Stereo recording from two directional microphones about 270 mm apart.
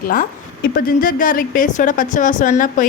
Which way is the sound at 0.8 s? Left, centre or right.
Left.